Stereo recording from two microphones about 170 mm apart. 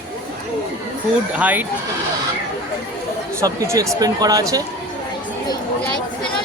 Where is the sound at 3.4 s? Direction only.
20° right (ahead or behind).